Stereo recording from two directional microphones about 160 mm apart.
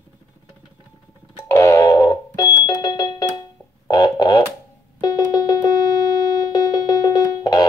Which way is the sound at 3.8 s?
25° left (ahead or behind).